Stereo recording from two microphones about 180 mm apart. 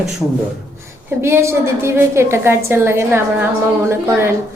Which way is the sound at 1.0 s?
15° right (ahead or behind).